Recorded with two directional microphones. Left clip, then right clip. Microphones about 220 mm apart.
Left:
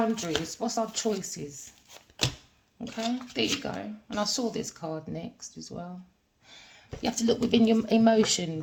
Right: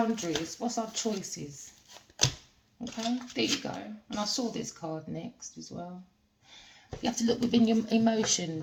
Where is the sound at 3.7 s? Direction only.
50° left (ahead or behind).